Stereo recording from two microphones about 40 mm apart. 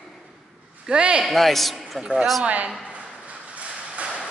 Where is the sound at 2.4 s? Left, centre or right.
Right.